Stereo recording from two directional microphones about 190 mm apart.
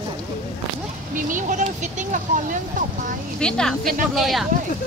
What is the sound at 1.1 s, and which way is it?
Vehicle, 40° right (ahead or behind).